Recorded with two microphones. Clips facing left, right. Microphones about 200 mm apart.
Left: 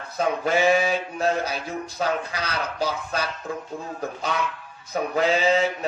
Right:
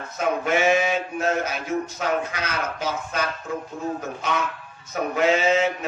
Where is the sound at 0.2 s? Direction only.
35° left (ahead or behind).